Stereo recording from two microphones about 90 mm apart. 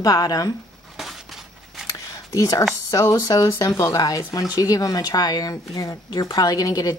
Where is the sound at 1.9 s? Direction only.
40° left (ahead or behind).